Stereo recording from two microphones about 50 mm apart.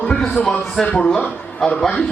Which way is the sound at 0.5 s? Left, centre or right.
Left.